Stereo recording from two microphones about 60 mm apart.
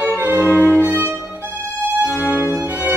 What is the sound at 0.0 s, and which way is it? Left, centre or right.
Violin, right.